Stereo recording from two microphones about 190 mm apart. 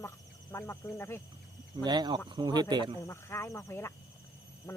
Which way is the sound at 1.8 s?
20° right (ahead or behind).